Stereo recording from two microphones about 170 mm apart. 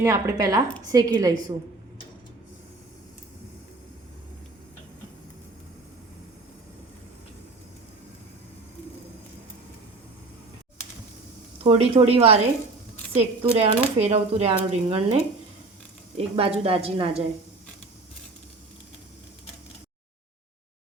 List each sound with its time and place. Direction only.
0.0 s a woman's voice: 20° right (ahead or behind)
11.6 s speech: 35° right (ahead or behind)